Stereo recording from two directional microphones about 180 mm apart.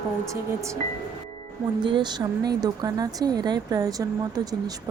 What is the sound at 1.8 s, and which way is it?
Speech, 25° right (ahead or behind).